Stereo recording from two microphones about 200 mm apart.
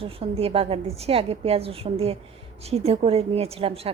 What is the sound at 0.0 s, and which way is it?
A woman's voice, 30° right (ahead or behind).